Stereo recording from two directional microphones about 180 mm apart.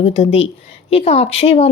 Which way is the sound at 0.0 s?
35° left (ahead or behind).